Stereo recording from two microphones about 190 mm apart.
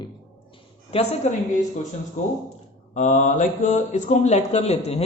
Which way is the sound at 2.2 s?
40° left (ahead or behind).